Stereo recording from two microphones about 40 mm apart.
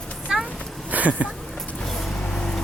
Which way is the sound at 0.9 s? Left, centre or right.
Right.